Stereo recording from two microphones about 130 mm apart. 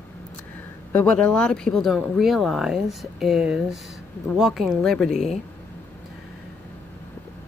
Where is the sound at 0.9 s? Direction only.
10° left (ahead or behind).